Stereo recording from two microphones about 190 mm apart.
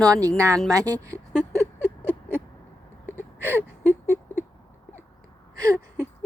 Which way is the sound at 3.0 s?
10° left (ahead or behind).